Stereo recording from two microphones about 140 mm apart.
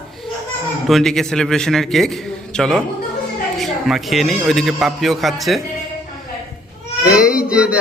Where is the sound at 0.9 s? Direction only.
Centre (ahead or behind).